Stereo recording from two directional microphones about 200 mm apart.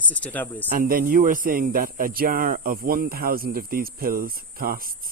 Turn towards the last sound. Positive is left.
turn(degrees=-45)  # may be behind; listen again after turning